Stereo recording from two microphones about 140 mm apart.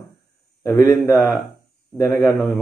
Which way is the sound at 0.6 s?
20° left (ahead or behind).